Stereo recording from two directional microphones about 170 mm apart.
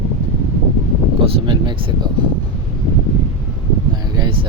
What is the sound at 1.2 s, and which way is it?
Speech, 25° right (ahead or behind).